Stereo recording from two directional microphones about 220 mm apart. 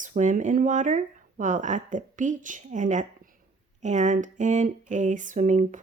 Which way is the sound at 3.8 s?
30° right (ahead or behind).